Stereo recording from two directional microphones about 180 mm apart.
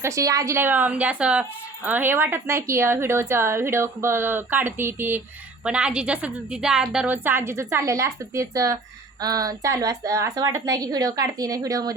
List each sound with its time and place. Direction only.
0.0 s a woman's voice: 15° right (ahead or behind)